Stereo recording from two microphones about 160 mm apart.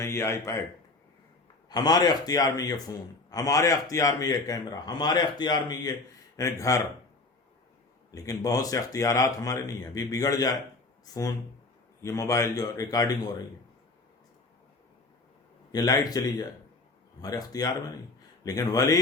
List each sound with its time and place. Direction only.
0.0 s speech: 20° left (ahead or behind)
1.7 s a man's voice: 25° left (ahead or behind)
8.1 s a man's voice: 20° left (ahead or behind)
15.7 s a man's voice: 25° left (ahead or behind)